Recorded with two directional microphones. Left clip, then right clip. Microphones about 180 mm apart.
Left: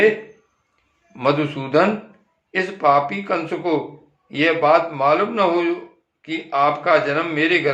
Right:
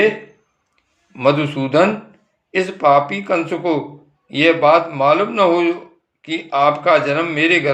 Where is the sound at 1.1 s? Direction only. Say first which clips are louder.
Right 4 dB; 35° right (ahead or behind).